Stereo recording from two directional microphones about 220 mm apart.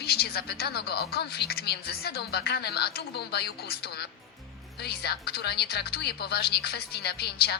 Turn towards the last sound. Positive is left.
turn(degrees=45)  # may be behind; listen again after turning